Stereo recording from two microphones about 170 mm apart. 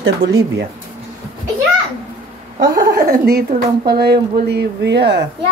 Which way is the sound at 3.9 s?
70° right (ahead or behind).